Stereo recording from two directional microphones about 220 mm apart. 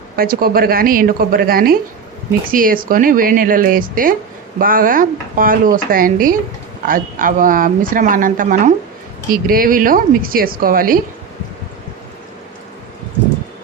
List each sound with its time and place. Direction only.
0.2 s speech: 40° right (ahead or behind)